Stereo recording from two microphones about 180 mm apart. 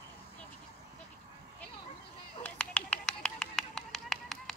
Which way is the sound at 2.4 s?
5° left (ahead or behind).